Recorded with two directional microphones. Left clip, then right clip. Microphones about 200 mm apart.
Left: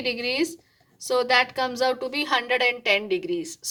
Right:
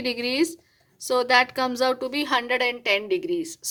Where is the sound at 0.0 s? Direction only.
30° right (ahead or behind).